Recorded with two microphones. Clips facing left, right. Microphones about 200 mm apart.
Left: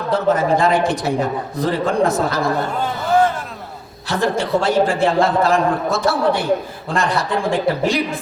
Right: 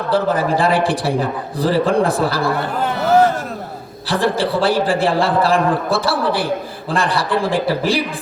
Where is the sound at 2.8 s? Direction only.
65° right (ahead or behind).